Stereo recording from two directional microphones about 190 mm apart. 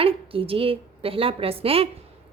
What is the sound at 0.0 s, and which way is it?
A woman's voice, 30° right (ahead or behind).